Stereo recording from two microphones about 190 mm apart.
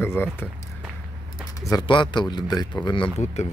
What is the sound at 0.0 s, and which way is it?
Speech, 10° left (ahead or behind).